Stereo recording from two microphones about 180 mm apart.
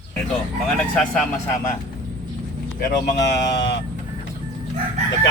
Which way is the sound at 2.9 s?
70° left (ahead or behind).